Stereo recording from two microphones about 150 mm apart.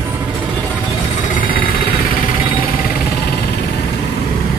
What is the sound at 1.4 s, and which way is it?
Vehicle, 75° left (ahead or behind).